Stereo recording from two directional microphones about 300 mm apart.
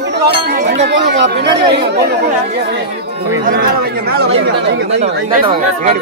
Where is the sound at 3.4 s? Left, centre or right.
Right.